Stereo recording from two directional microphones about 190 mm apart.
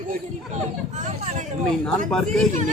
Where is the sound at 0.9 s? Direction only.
35° right (ahead or behind).